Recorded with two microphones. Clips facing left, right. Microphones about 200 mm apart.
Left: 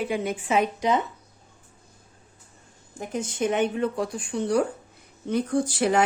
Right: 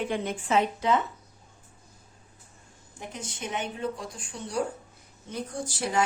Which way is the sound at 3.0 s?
50° left (ahead or behind).